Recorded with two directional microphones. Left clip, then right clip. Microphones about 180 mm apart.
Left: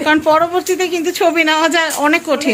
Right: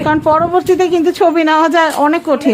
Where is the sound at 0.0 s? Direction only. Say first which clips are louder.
Even; 35° right (ahead or behind).